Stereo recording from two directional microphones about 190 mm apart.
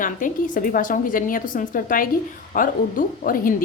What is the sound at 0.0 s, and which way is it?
A woman's voice, 45° left (ahead or behind).